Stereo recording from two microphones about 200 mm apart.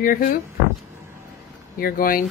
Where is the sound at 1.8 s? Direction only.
45° left (ahead or behind).